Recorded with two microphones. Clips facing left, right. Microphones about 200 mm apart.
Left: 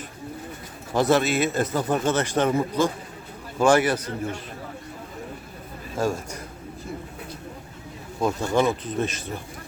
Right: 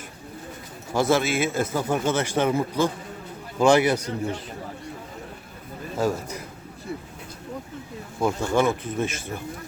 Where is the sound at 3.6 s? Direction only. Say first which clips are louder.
Right 1 dB; 10° right (ahead or behind).